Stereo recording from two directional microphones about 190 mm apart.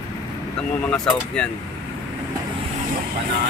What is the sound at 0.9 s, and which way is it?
Speech, 5° left (ahead or behind).